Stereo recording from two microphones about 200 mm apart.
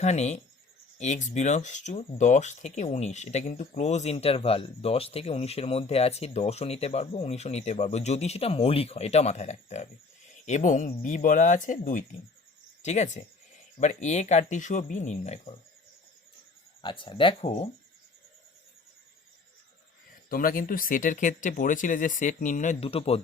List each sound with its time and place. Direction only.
0.0 s speech: 35° left (ahead or behind)
16.8 s speech: 25° left (ahead or behind)
20.3 s speech: 45° left (ahead or behind); by 23.2 s 30° left (ahead or behind)